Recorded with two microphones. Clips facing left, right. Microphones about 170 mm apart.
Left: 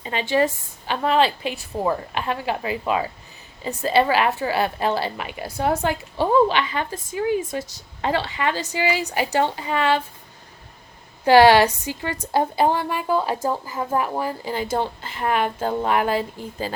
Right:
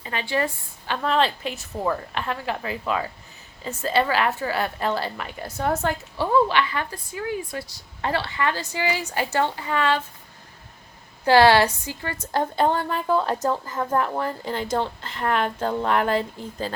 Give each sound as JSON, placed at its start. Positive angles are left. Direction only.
{"t": 0.0, "sound": "a woman's voice", "side_deg": 25}
{"t": 11.3, "sound": "a woman's voice", "side_deg": 15}